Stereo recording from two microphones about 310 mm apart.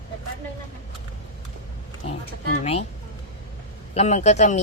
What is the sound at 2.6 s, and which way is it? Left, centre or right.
Speech, centre.